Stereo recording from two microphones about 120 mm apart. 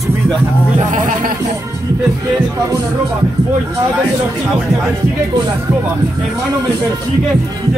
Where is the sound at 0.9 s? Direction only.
90° right.